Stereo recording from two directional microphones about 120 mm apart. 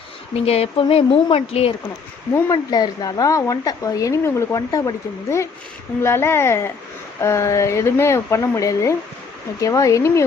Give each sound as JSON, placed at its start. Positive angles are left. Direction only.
{"t": 0.3, "sound": "speech", "side_deg": 60}
{"t": 2.5, "sound": "speech", "side_deg": 35}